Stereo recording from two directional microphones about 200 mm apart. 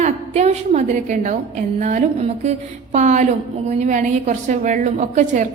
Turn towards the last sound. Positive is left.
turn(degrees=-35)  # may be behind; listen again after turning